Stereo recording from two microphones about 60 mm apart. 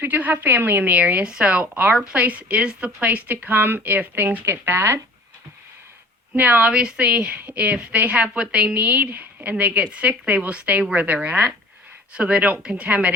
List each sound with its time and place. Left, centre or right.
0.0 s a woman's voice: right
6.3 s speech: right